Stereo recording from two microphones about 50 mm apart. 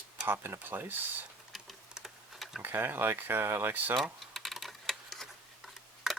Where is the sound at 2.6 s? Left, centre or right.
Right.